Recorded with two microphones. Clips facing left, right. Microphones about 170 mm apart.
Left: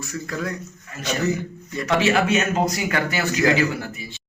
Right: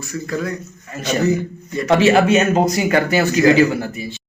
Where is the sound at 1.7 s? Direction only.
30° right (ahead or behind).